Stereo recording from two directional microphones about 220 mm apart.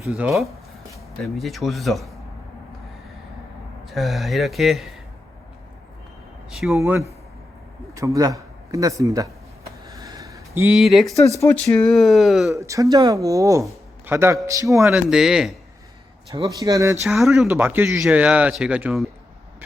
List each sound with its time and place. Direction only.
0.1 s speech: 5° right (ahead or behind)
3.8 s speech: centre (ahead or behind)
6.7 s a man's voice: 10° right (ahead or behind)
9.8 s a sound: 15° right (ahead or behind); by 11.2 s centre (ahead or behind)
11.3 s speech: 10° left (ahead or behind)
12.5 s speech: 15° right (ahead or behind)
15.1 s speech: centre (ahead or behind)
16.3 s speech: 15° right (ahead or behind)
17.0 s speech: centre (ahead or behind)